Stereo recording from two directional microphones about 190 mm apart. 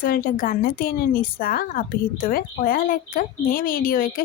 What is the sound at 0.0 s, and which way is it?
A woman's voice, 50° left (ahead or behind).